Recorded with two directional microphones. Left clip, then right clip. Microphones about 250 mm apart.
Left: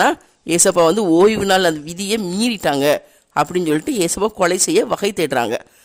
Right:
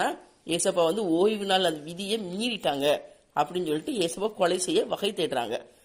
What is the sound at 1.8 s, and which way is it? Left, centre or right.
Speech, left.